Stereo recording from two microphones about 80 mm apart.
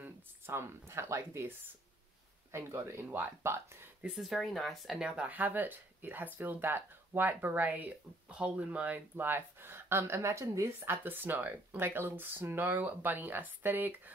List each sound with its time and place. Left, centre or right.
0.0 s speech: right
4.1 s speech: centre
4.9 s speech: centre; by 10.9 s right
10.9 s speech: right